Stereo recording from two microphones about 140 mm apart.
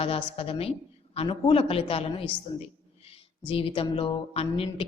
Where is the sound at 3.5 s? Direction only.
40° left (ahead or behind).